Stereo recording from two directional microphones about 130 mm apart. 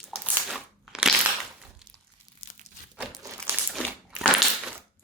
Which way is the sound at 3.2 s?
25° right (ahead or behind).